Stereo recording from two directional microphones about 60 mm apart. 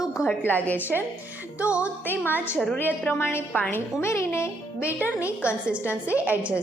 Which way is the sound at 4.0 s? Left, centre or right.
Left.